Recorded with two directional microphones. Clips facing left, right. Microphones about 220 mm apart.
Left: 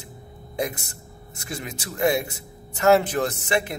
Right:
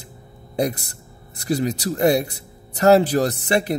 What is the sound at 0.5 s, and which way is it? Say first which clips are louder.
Speech: right 6 dB; 35° right (ahead or behind).